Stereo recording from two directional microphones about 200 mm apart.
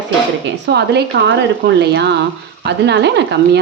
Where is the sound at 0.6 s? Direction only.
55° right (ahead or behind).